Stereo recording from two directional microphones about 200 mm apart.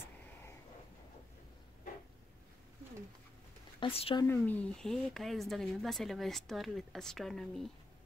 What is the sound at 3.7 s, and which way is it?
Speech, 25° left (ahead or behind).